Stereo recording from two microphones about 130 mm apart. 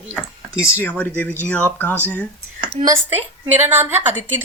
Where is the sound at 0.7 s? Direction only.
15° left (ahead or behind).